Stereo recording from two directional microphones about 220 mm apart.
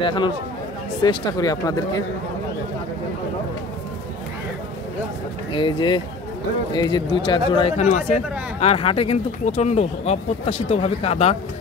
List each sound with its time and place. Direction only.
0.0 s speech: 20° left (ahead or behind)
5.5 s speech: 20° left (ahead or behind)